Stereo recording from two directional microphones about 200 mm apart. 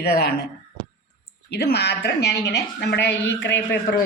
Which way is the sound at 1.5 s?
55° left (ahead or behind).